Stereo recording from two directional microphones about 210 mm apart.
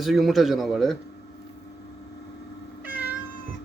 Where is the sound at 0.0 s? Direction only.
Centre (ahead or behind).